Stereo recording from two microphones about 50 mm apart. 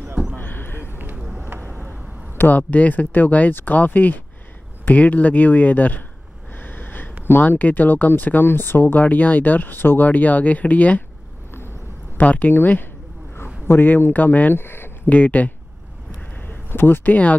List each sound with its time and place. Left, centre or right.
0.4 s a sound: left
2.3 s speech: left
6.5 s a sound: left
7.4 s speech: left
9.0 s speech: left
12.2 s speech: left
13.8 s speech: left
14.5 s speech: left
15.0 s speech: left
16.3 s a sound: left
17.1 s speech: left